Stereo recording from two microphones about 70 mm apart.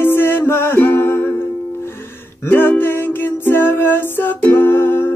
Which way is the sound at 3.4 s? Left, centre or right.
Left.